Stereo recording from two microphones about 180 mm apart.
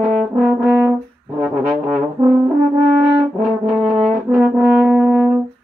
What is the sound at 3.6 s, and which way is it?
Brass instrument, 10° right (ahead or behind).